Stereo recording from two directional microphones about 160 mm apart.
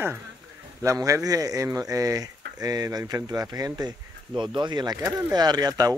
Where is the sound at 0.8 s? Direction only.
20° right (ahead or behind).